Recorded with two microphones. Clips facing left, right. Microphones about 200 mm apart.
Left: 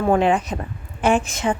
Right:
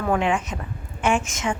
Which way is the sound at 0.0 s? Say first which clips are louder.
Left 5 dB; 35° left (ahead or behind).